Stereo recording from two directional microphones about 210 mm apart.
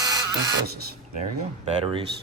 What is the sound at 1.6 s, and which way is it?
Speech, 25° right (ahead or behind).